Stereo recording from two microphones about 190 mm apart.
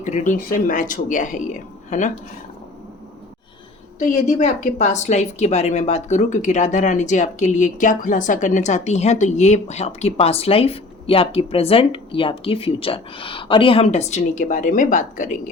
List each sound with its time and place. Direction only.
0.0 s a woman's voice: 40° left (ahead or behind)
4.0 s a woman's voice: 40° left (ahead or behind)